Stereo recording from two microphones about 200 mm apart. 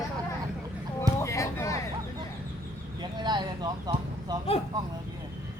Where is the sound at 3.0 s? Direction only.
20° right (ahead or behind).